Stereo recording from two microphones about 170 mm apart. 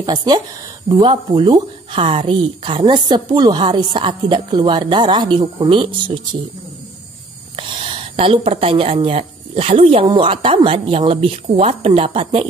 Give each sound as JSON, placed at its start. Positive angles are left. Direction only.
{"t": 0.0, "sound": "speech", "side_deg": -25}
{"t": 7.5, "sound": "a woman's voice", "side_deg": -30}